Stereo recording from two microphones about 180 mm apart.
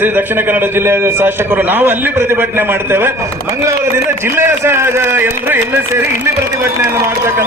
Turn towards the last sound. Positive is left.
turn(degrees=-10)  # may be behind; listen again after turning